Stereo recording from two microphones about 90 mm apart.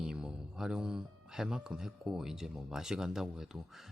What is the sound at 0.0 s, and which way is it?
Speech, 5° right (ahead or behind).